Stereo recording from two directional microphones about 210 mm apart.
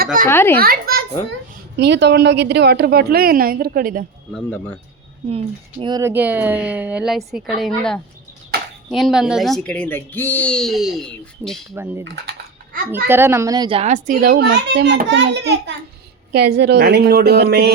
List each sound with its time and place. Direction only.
0.0 s a child's voice: 40° right (ahead or behind)
0.3 s speech: 10° left (ahead or behind)
0.6 s a sound: 45° right (ahead or behind)
1.8 s a child's voice: 55° right (ahead or behind)
4.3 s speech: 5° left (ahead or behind)
5.3 s speech: 25° right (ahead or behind); by 8.0 s centre (ahead or behind)
8.5 s a sound: 50° right (ahead or behind)
8.9 s speech: centre (ahead or behind)
11.7 s speech: 10° right (ahead or behind)
12.0 s a child's voice: 55° right (ahead or behind)
12.9 s a child's voice: 10° right (ahead or behind); by 17.7 s 50° right (ahead or behind)